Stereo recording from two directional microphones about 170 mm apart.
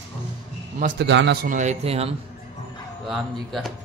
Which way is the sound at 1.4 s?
45° right (ahead or behind).